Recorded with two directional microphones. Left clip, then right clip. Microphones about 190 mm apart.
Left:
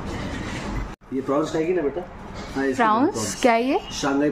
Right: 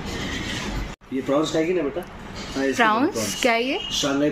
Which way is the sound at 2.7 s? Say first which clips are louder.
Even; 10° left (ahead or behind).